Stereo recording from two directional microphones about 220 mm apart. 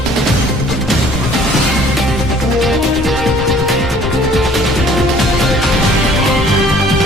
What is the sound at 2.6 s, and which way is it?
Music, centre (ahead or behind).